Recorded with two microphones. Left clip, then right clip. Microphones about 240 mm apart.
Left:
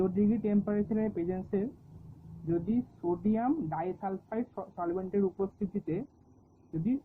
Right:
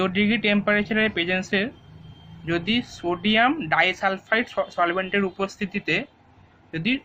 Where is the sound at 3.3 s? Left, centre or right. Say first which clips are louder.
Right 13 dB; right.